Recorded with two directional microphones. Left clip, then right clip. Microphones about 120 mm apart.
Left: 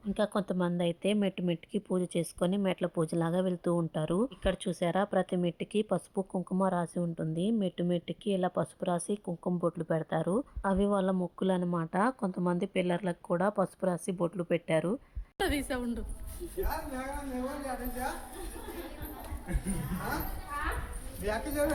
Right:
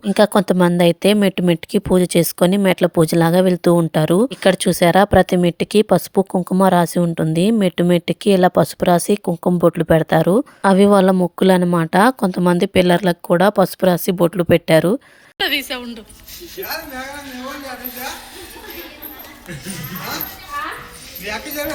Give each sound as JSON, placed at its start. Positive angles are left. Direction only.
{"t": 0.0, "sound": "a woman's voice", "side_deg": -45}
{"t": 15.7, "sound": "a woman's voice", "side_deg": 40}